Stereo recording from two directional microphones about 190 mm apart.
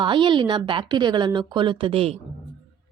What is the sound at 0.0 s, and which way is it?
A woman's voice, 25° right (ahead or behind).